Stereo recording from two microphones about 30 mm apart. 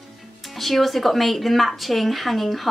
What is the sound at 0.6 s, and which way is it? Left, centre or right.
Speech, centre.